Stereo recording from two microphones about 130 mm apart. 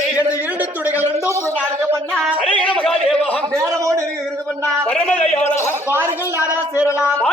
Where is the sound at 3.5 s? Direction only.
25° right (ahead or behind).